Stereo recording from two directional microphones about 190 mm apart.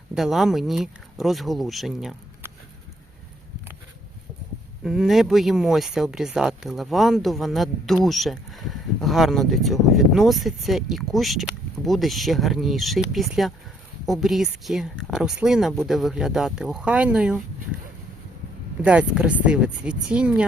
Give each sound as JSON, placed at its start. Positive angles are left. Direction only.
{"t": 0.1, "sound": "speech", "side_deg": 0}
{"t": 4.8, "sound": "speech", "side_deg": 0}
{"t": 18.8, "sound": "speech", "side_deg": -5}